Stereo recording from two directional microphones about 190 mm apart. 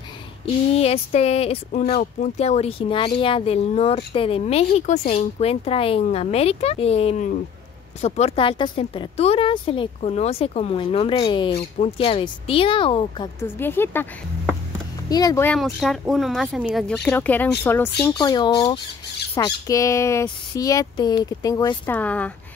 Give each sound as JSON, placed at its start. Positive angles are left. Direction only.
{"t": 0.7, "sound": "speech", "side_deg": 30}
{"t": 13.4, "sound": "speech", "side_deg": 10}
{"t": 15.5, "sound": "speech", "side_deg": 0}
{"t": 21.8, "sound": "speech", "side_deg": 10}